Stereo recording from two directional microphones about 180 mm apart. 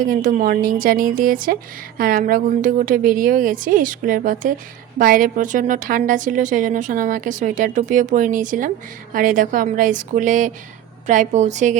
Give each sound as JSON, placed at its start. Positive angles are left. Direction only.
{"t": 0.0, "sound": "a woman's voice", "side_deg": -50}